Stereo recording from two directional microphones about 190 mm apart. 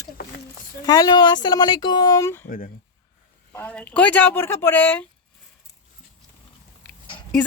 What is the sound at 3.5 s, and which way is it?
Speech, 10° left (ahead or behind).